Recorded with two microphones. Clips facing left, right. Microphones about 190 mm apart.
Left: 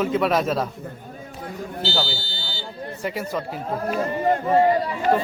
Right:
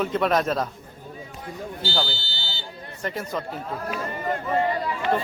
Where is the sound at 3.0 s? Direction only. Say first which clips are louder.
Left 2 dB; 10° left (ahead or behind).